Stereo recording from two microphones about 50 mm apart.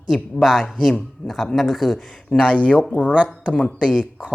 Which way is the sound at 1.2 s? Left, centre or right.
Left.